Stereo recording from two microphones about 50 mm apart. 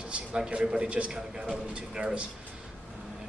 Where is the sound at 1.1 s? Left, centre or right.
Centre.